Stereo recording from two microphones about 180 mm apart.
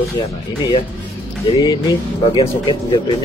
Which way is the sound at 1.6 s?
20° left (ahead or behind).